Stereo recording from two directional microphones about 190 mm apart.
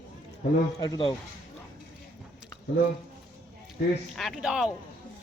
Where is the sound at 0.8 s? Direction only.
25° left (ahead or behind).